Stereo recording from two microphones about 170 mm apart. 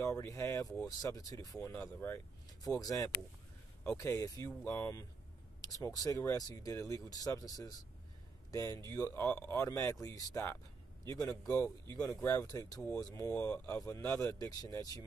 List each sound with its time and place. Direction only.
0.0 s speech: 15° left (ahead or behind)
4.5 s speech: 5° left (ahead or behind)
4.7 s speech: 15° left (ahead or behind)